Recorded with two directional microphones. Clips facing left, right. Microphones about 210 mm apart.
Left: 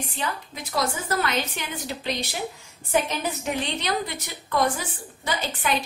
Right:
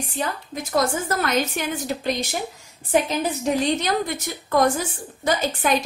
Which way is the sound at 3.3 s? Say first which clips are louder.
Right 6 dB; 45° right (ahead or behind).